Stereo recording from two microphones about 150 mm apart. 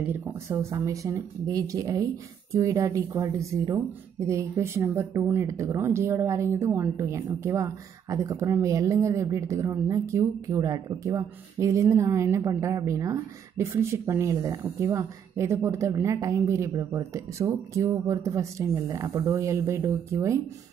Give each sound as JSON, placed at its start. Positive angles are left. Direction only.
{"t": 0.0, "sound": "speech", "side_deg": -15}